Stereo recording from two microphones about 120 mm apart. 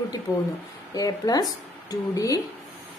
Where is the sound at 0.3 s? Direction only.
25° left (ahead or behind).